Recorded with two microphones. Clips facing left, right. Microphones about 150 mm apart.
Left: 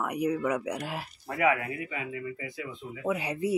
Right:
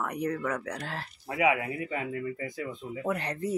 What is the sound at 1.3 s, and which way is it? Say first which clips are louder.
Speech: even; 15° right (ahead or behind).